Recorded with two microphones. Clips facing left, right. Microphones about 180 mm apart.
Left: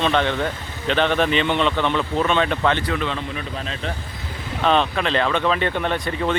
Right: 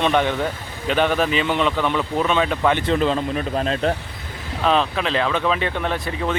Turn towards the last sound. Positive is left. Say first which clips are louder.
# left 1 dB
turn(degrees=0)  # may be behind; listen again after turning